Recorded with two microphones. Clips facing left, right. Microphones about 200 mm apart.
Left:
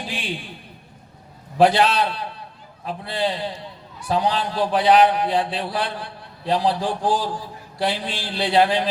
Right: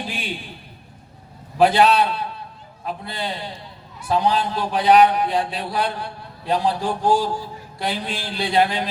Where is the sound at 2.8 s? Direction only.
35° left (ahead or behind).